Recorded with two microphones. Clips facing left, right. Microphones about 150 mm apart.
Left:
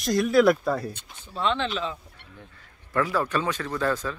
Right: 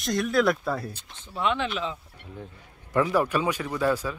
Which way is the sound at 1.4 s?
10° right (ahead or behind).